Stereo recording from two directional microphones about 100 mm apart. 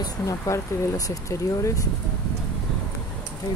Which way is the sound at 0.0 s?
35° left (ahead or behind).